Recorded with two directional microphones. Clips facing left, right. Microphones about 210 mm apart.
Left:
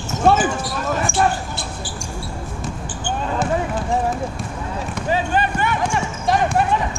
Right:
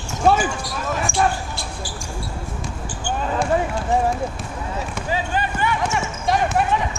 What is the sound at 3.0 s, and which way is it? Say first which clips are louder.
Basketball bounce: even; centre (ahead or behind).